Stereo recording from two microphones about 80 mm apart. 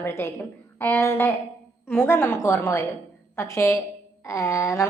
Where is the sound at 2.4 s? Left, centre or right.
Left.